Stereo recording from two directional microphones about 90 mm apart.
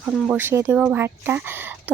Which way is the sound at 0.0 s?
15° right (ahead or behind).